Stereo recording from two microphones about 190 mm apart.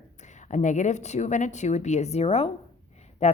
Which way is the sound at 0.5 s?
40° left (ahead or behind).